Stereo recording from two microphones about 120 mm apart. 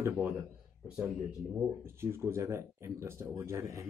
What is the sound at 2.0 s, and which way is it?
Speech, 20° right (ahead or behind).